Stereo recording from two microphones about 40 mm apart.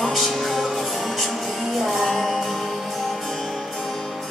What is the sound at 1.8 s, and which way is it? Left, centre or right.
Music, centre.